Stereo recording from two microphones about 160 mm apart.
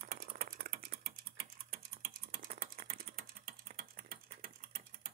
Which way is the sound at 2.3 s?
65° right (ahead or behind).